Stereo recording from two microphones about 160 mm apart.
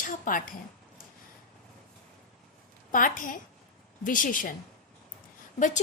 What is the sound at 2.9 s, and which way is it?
A woman's voice, 55° left (ahead or behind).